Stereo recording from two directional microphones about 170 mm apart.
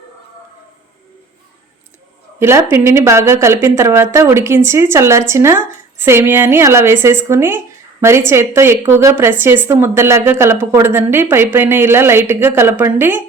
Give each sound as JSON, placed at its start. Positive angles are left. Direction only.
{"t": 2.4, "sound": "a woman's voice", "side_deg": -15}